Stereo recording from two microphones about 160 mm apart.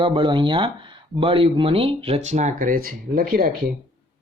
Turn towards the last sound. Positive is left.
turn(degrees=-65)  # may be behind; listen again after turning